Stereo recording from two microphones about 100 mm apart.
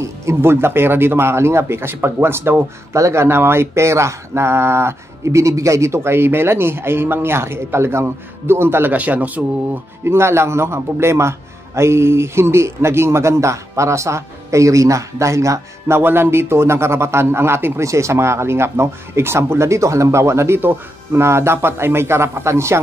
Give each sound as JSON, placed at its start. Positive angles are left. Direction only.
{"t": 0.0, "sound": "speech", "side_deg": -30}